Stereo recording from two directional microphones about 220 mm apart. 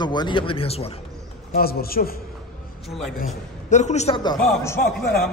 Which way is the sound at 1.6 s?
45° left (ahead or behind).